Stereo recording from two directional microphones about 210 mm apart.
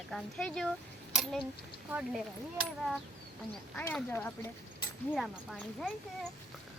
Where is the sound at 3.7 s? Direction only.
10° left (ahead or behind).